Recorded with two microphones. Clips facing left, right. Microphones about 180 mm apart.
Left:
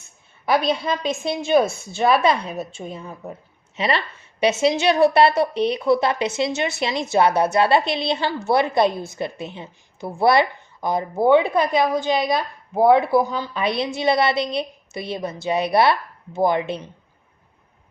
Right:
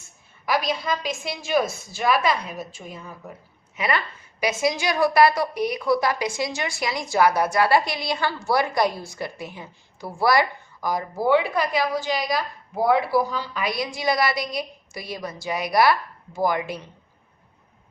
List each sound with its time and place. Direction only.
0.4 s a woman's voice: 25° left (ahead or behind)